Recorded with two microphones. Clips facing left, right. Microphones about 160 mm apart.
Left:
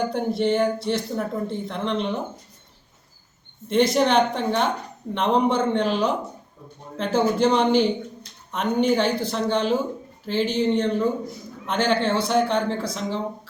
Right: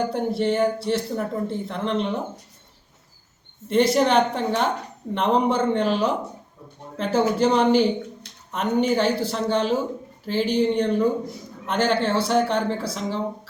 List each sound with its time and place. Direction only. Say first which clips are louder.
0.1 s speech: left 1 dB; 5° right (ahead or behind)
3.7 s speech: right 1 dB; 5° right (ahead or behind)